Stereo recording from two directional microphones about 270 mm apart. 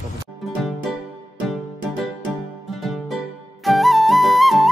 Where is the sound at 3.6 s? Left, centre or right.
Centre.